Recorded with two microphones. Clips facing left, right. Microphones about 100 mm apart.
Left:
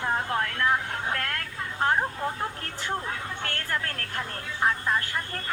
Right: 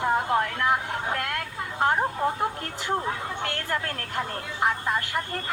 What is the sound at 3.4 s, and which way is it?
A woman's voice, 20° right (ahead or behind).